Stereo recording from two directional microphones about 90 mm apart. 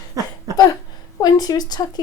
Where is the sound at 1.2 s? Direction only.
45° left (ahead or behind).